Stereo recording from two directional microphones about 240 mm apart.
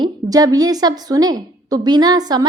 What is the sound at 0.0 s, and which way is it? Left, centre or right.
A woman's voice, centre.